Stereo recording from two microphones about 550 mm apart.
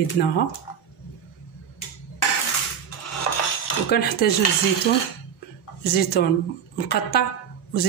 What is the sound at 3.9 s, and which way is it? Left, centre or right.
Speech, centre.